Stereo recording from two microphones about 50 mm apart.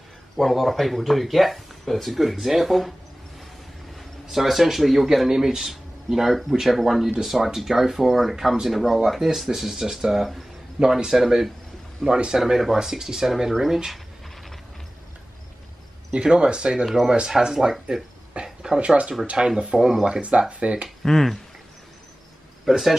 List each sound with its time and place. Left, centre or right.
0.4 s speech: centre
4.3 s a man's voice: centre
12.0 s speech: centre
16.1 s speech: centre
16.8 s a man's voice: centre
18.3 s a sound: centre
18.8 s speech: right
21.0 s speech: centre
22.7 s speech: centre